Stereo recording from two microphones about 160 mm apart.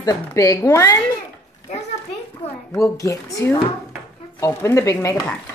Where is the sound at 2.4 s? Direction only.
40° left (ahead or behind).